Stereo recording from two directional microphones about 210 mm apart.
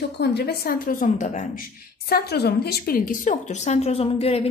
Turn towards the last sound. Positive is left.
turn(degrees=25)  # may be behind; listen again after turning